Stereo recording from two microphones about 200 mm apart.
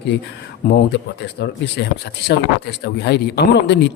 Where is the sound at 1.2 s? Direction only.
55° left (ahead or behind).